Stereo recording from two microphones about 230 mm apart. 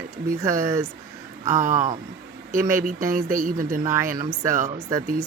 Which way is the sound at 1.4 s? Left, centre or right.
Right.